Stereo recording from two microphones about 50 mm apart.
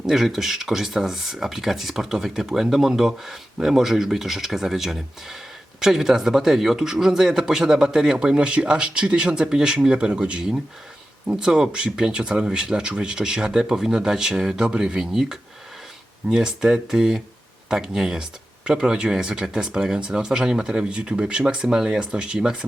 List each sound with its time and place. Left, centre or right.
0.0 s speech: centre